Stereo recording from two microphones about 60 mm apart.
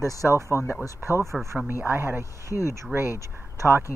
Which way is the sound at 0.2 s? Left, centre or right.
Right.